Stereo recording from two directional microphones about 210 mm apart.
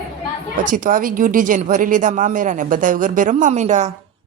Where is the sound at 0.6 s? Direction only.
40° right (ahead or behind).